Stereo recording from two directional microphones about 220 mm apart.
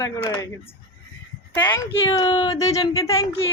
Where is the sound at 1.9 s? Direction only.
20° left (ahead or behind).